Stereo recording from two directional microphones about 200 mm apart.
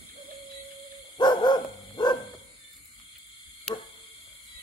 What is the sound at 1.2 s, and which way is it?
Dog, 20° left (ahead or behind).